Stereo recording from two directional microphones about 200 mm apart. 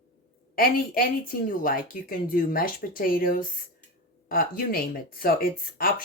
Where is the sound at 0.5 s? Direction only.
45° left (ahead or behind).